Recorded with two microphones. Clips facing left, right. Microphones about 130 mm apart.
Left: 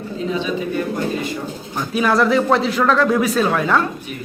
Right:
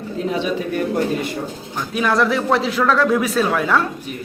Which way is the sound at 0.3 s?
65° right (ahead or behind).